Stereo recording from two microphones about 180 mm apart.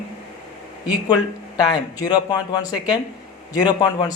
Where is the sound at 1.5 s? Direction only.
25° left (ahead or behind).